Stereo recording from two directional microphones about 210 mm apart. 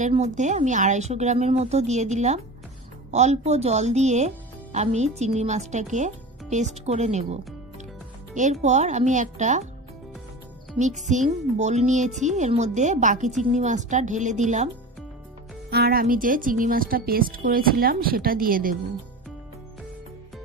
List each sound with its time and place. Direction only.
0.0 s speech: 35° right (ahead or behind)
8.4 s speech: 35° right (ahead or behind)
10.8 s speech: 35° right (ahead or behind)
15.7 s a woman's voice: 45° right (ahead or behind)